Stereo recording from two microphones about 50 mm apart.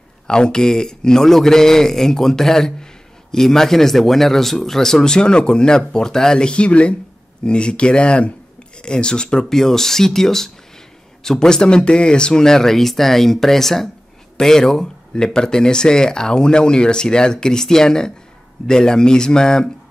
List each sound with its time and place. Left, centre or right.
0.3 s a man's voice: centre